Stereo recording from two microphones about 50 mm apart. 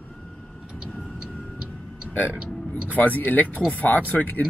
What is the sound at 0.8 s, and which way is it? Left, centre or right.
Vehicle, centre.